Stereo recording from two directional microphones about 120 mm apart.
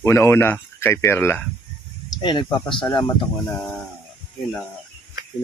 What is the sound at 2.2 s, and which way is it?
Speech, 40° left (ahead or behind).